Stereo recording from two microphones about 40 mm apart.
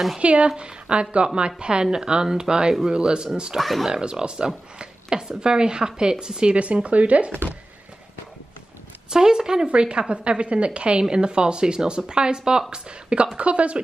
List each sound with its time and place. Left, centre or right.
0.2 s a woman's voice: right
3.5 s speech: centre
3.9 s a woman's voice: right
6.5 s speech: right
9.1 s a woman's voice: centre